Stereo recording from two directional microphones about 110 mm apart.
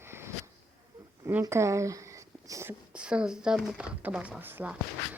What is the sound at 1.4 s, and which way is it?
A woman's voice, 25° right (ahead or behind).